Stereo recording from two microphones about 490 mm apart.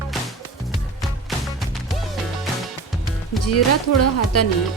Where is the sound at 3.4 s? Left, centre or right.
Left.